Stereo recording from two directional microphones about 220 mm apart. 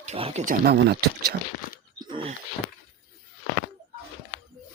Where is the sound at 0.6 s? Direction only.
45° right (ahead or behind).